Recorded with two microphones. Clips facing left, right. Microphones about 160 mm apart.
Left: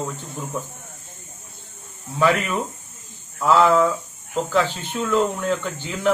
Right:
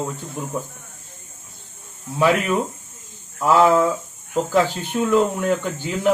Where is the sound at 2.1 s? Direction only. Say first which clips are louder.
Right 2 dB; 15° right (ahead or behind).